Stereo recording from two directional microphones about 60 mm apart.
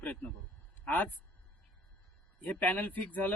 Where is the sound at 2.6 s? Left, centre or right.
Left.